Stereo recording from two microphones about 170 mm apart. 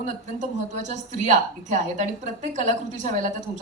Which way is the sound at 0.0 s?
45° right (ahead or behind).